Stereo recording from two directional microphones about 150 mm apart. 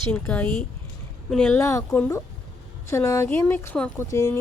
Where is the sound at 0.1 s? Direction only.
10° left (ahead or behind).